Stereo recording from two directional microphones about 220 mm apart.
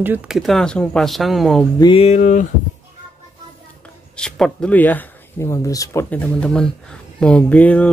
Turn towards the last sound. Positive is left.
turn(degrees=5)  # may be behind; listen again after turning